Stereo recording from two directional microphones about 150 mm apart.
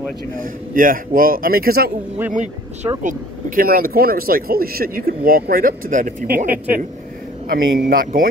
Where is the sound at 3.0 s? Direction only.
60° right (ahead or behind).